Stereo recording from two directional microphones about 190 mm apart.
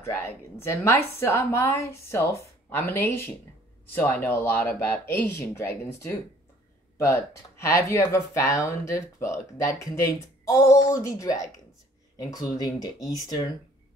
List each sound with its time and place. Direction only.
0.0 s a woman's voice: 15° left (ahead or behind)